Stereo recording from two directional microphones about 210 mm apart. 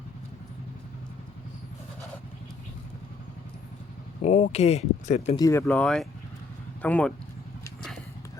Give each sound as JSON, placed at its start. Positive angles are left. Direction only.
{"t": 4.2, "sound": "speech", "side_deg": 35}
{"t": 5.4, "sound": "speech", "side_deg": 15}